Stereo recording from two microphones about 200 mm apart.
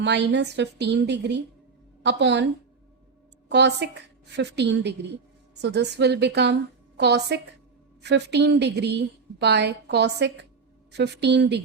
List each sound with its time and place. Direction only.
0.0 s a woman's voice: 60° right (ahead or behind)
3.5 s a woman's voice: 60° right (ahead or behind)